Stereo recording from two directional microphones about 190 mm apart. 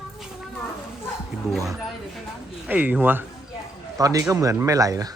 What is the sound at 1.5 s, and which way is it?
A man's voice, centre (ahead or behind).